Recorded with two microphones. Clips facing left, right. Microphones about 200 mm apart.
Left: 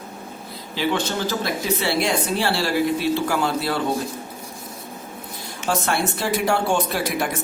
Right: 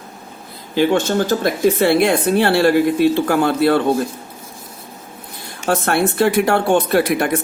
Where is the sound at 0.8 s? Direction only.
50° right (ahead or behind).